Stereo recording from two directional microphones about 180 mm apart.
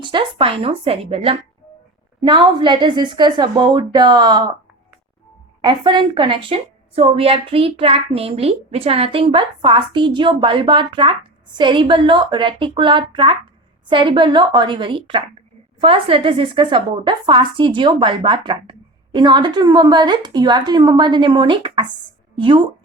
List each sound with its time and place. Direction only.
0.0 s a woman's voice: 30° right (ahead or behind)
5.6 s a woman's voice: 25° right (ahead or behind)